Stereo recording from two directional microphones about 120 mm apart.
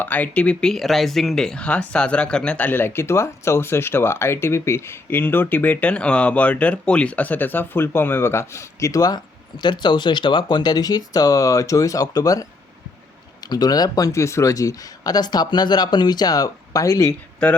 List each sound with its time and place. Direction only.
0.0 s speech: 15° left (ahead or behind); by 12.5 s 30° left (ahead or behind)
13.5 s speech: 35° left (ahead or behind)
17.1 s speech: 10° left (ahead or behind)